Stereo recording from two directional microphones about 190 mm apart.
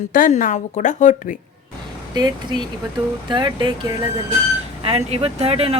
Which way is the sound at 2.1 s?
20° right (ahead or behind).